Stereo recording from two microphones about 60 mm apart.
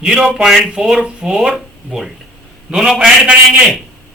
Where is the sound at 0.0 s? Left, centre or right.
Centre.